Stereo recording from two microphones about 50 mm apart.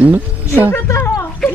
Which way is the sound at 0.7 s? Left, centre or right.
Left.